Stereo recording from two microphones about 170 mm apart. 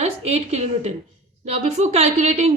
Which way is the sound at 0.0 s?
40° right (ahead or behind).